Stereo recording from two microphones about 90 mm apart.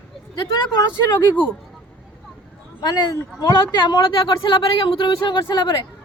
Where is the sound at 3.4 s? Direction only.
50° left (ahead or behind).